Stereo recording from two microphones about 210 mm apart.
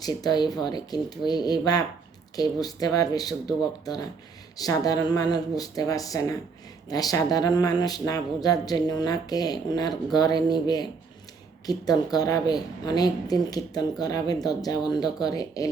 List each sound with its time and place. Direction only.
0.0 s speech: 20° left (ahead or behind)